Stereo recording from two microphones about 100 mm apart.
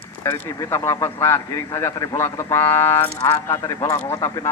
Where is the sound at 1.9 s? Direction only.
40° left (ahead or behind).